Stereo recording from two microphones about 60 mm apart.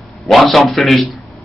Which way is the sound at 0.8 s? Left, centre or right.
Centre.